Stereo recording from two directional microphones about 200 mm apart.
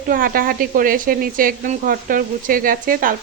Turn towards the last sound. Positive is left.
turn(degrees=-45)  # may be behind; listen again after turning